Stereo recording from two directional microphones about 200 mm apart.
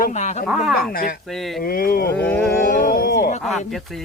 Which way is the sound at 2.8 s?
45° left (ahead or behind).